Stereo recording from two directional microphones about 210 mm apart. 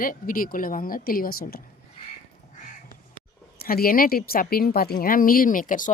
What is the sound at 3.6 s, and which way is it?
Speech, 45° left (ahead or behind).